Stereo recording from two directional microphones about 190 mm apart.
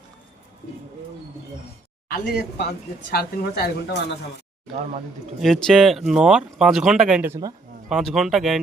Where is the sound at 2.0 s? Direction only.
50° left (ahead or behind).